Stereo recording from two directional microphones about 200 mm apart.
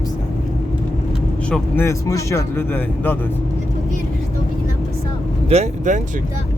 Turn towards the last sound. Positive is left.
turn(degrees=-35)  # may be behind; listen again after turning